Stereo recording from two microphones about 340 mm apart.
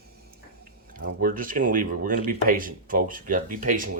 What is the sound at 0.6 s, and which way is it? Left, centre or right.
Speech, right.